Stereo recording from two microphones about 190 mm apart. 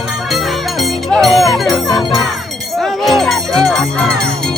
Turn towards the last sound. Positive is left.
turn(degrees=5)  # may be behind; listen again after turning